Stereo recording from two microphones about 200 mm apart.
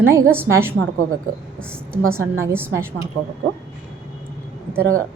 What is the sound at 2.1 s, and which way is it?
Speech, 10° right (ahead or behind).